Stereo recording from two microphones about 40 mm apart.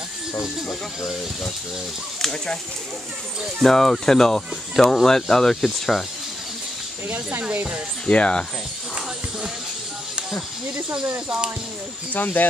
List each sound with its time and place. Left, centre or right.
3.6 s speech: centre
7.1 s speech: right
8.1 s speech: left
12.1 s speech: left